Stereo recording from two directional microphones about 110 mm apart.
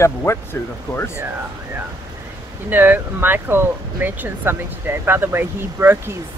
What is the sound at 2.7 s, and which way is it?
Speech, 20° right (ahead or behind).